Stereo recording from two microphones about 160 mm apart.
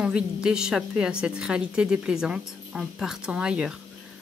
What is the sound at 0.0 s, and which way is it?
A woman's voice, 5° right (ahead or behind).